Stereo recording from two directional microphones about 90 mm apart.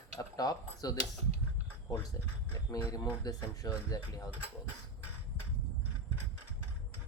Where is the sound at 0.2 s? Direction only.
45° left (ahead or behind).